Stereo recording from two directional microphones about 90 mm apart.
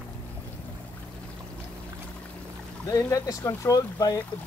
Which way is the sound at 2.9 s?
35° left (ahead or behind).